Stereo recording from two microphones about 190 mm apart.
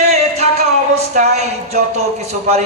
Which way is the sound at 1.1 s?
35° right (ahead or behind).